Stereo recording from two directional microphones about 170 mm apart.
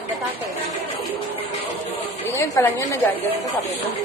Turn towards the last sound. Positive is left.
turn(degrees=15)  # may be behind; listen again after turning